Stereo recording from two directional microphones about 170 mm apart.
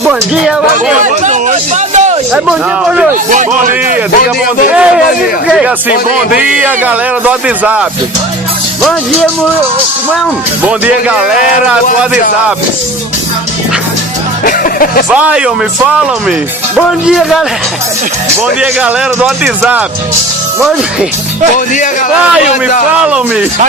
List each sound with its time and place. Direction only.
1.0 s a sound: 45° right (ahead or behind)
2.3 s a man's voice: 5° right (ahead or behind)
3.2 s speech: 50° right (ahead or behind)
4.7 s a man's voice: 5° right (ahead or behind)
8.8 s a man's voice: 5° left (ahead or behind)
10.6 s speech: 10° right (ahead or behind)
14.4 s music: 55° left (ahead or behind)
15.1 s a man's voice: 5° right (ahead or behind)
18.6 s a man's voice: 5° right (ahead or behind)
23.0 s speech: 5° right (ahead or behind)